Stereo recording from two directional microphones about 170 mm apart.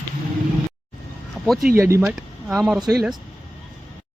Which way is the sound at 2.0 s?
Centre (ahead or behind).